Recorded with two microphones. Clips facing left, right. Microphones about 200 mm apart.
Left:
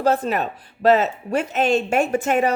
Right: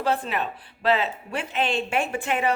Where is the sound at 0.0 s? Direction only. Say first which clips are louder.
Left 6 dB; 45° left (ahead or behind).